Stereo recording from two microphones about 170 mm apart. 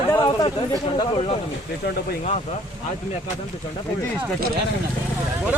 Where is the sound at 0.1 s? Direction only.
25° left (ahead or behind).